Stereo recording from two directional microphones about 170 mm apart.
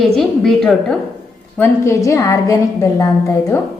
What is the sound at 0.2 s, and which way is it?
Speech, centre (ahead or behind).